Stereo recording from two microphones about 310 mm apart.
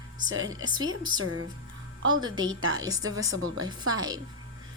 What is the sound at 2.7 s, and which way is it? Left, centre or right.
Speech, centre.